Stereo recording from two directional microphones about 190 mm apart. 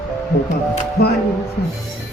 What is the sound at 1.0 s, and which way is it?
Speech, 60° left (ahead or behind).